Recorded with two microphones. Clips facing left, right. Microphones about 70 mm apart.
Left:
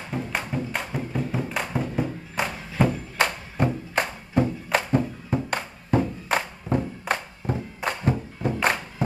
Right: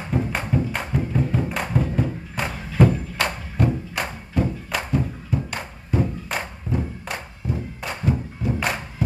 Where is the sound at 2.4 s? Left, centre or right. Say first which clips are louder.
Left 1 dB; centre.